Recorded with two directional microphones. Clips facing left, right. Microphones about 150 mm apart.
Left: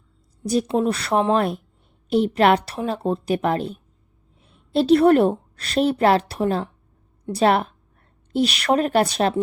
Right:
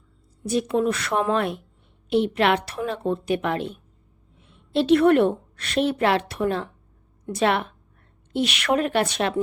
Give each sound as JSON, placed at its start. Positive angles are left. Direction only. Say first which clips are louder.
{"t": 0.4, "sound": "a woman's voice", "louder": "left 2 dB", "side_deg": 35}